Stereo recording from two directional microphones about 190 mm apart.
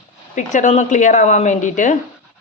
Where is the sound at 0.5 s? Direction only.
40° left (ahead or behind).